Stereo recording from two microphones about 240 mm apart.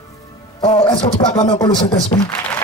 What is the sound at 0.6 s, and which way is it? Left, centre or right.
Speech, centre.